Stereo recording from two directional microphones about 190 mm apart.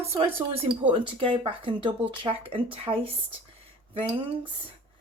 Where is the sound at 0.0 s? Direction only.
30° right (ahead or behind).